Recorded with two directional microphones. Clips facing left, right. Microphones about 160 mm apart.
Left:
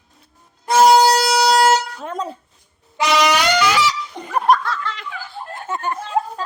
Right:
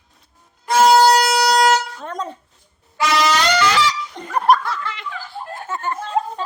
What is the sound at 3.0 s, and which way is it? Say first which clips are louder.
Brass instrument: left 1 dB; 20° left (ahead or behind).